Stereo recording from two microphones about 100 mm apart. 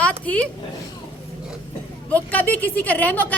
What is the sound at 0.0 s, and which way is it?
Speech, 10° left (ahead or behind).